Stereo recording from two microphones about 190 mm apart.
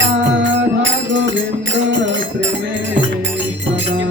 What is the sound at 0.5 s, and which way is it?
Music, 75° right (ahead or behind).